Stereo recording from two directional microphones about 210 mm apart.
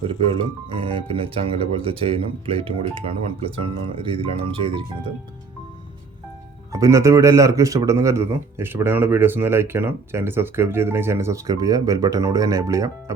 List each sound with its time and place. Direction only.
0.7 s speech: 25° right (ahead or behind)
6.7 s speech: 15° right (ahead or behind)